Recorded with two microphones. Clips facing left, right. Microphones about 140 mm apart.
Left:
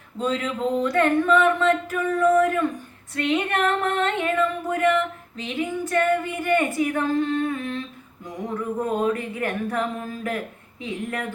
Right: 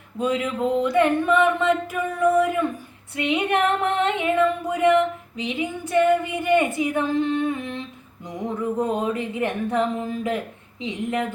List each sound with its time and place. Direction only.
0.2 s music: 10° right (ahead or behind)
8.7 s speech: 20° right (ahead or behind)